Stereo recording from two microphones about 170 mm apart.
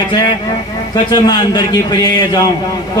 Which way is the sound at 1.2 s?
25° left (ahead or behind).